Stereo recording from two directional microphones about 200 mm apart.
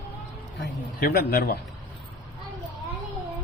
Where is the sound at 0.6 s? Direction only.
50° left (ahead or behind).